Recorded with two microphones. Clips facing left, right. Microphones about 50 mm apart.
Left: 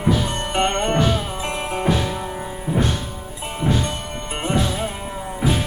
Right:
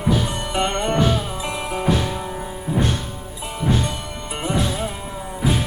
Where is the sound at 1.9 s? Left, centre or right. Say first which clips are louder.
Even; centre.